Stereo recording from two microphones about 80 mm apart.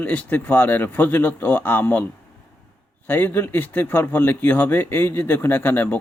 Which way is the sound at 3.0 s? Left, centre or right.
Left.